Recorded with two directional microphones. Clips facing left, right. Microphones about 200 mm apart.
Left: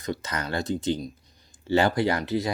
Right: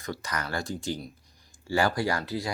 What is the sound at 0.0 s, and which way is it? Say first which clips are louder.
Speech: left 3 dB; 20° left (ahead or behind).